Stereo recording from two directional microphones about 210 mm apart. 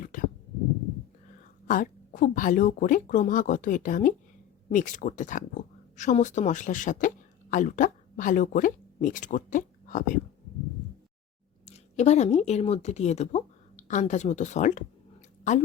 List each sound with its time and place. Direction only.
0.0 s a sound: 40° left (ahead or behind)
1.6 s speech: 40° left (ahead or behind)
11.6 s speech: 30° left (ahead or behind)